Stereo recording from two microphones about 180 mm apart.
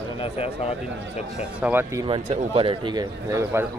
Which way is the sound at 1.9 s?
30° right (ahead or behind).